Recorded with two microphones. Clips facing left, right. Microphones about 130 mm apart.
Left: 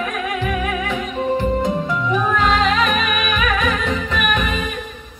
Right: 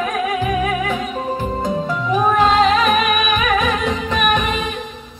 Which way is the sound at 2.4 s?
25° right (ahead or behind).